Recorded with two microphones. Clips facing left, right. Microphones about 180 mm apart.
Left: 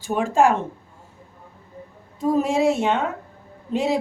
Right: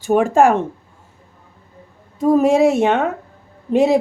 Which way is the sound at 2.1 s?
50° right (ahead or behind).